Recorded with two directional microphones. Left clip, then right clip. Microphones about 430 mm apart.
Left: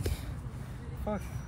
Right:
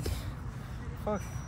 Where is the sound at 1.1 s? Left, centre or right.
Centre.